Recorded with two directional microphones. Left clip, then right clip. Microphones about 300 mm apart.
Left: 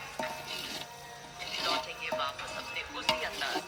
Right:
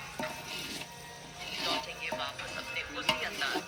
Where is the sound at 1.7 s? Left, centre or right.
Left.